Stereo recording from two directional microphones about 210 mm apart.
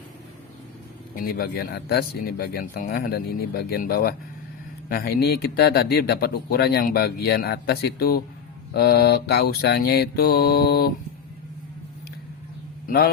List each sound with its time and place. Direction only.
1.1 s speech: 45° left (ahead or behind)